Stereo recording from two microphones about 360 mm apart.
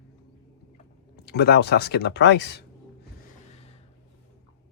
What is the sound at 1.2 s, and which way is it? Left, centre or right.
Speech, left.